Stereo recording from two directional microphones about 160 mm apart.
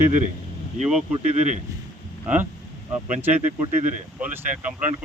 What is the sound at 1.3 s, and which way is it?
Speech, 45° right (ahead or behind).